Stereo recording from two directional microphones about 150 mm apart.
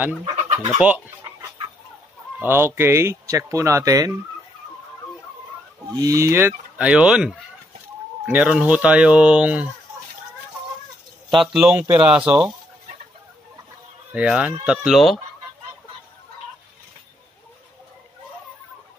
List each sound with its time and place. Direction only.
0.2 s chicken: 50° right (ahead or behind)
0.7 s speech: 5° right (ahead or behind)
2.3 s speech: 15° right (ahead or behind)
5.9 s speech: 20° right (ahead or behind)
11.4 s speech: 5° right (ahead or behind)
14.1 s speech: 10° right (ahead or behind)